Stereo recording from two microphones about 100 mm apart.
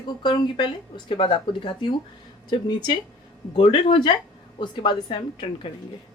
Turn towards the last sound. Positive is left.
turn(degrees=55)  # may be behind; listen again after turning